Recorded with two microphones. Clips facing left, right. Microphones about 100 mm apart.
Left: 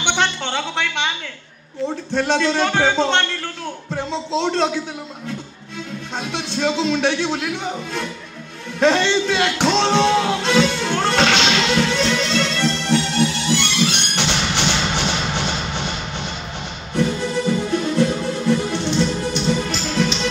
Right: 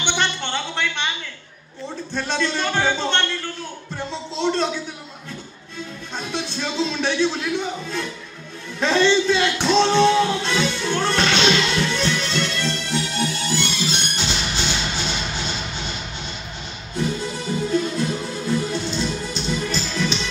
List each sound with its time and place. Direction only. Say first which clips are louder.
0.0 s speech: left 3 dB; 90° left
2.1 s a man's voice: left 6 dB; 70° left (ahead or behind); by 4.6 s 90° left
6.1 s speech: left 2 dB; 75° left (ahead or behind)
8.7 s music: left 1 dB; 70° left (ahead or behind); by 12.9 s 90° left
13.5 s music: left 4 dB; 70° left (ahead or behind)
17.0 s music: left 5 dB; 65° left (ahead or behind); by 20.2 s 90° left